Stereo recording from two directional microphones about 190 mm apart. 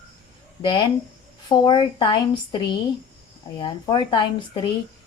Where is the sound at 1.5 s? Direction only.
25° left (ahead or behind).